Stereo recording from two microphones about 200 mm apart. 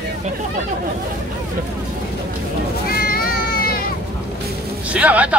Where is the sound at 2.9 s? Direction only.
50° left (ahead or behind).